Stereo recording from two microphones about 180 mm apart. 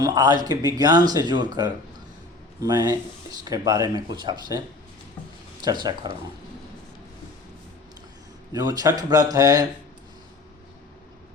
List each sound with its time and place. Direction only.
0.0 s speech: 20° right (ahead or behind)
5.6 s speech: 25° right (ahead or behind)
8.5 s speech: 20° right (ahead or behind)